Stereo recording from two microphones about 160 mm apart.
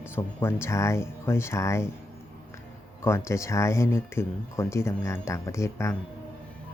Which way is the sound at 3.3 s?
15° left (ahead or behind).